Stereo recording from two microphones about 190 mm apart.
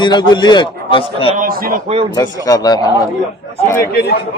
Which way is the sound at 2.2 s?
20° left (ahead or behind).